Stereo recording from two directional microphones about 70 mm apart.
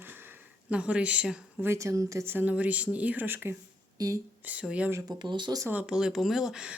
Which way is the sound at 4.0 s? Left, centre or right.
Right.